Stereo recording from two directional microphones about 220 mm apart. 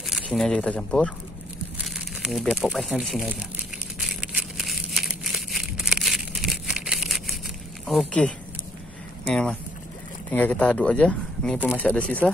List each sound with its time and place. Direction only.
0.1 s speech: centre (ahead or behind)
4.0 s crumpling: 5° right (ahead or behind)
7.8 s speech: centre (ahead or behind)